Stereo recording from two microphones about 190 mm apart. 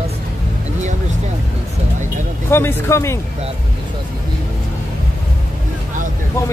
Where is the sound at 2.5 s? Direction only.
10° left (ahead or behind).